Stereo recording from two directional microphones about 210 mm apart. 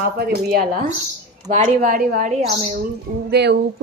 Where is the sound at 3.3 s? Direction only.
50° right (ahead or behind).